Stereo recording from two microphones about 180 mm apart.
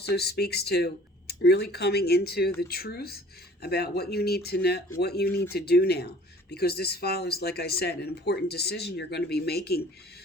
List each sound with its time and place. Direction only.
0.1 s speech: 60° left (ahead or behind)